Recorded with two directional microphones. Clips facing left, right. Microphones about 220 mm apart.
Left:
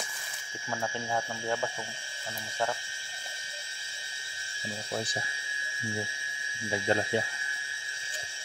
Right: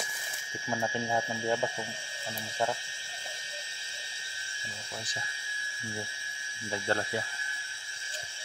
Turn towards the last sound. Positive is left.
turn(degrees=20)  # may be behind; listen again after turning